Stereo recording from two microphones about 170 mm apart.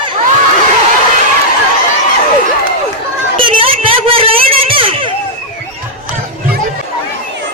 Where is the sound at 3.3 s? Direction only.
30° right (ahead or behind).